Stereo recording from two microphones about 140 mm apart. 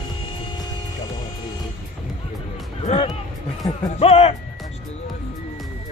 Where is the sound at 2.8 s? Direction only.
45° left (ahead or behind).